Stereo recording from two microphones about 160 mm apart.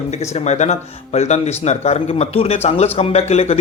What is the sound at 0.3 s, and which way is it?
Speech, 45° left (ahead or behind).